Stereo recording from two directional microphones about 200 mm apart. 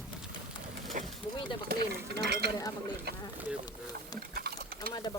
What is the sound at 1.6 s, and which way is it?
Speech, 50° right (ahead or behind).